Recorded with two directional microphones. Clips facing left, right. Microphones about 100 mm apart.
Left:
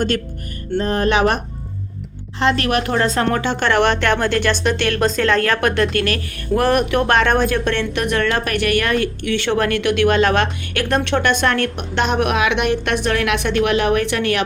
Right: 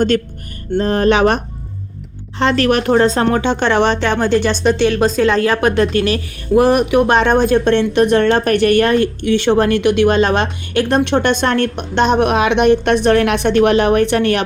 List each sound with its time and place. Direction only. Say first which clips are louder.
0.8 s a woman's voice: right 4 dB; 35° right (ahead or behind)
2.4 s a woman's voice: right 4 dB; 35° right (ahead or behind)